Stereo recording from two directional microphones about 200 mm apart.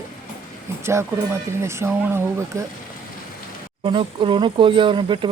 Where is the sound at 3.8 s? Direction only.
25° right (ahead or behind).